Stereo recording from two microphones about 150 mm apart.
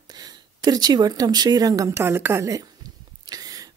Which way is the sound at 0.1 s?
25° right (ahead or behind).